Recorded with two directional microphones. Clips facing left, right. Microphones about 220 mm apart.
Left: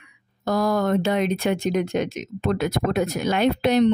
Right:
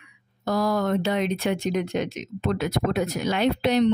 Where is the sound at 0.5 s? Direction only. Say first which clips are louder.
Left 2 dB; 50° left (ahead or behind).